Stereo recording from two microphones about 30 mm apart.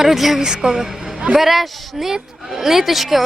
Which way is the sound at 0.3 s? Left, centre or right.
Right.